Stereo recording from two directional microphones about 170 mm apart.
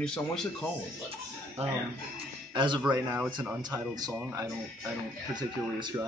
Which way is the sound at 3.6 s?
25° right (ahead or behind).